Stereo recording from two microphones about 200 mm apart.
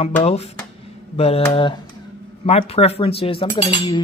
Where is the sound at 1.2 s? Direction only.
30° left (ahead or behind).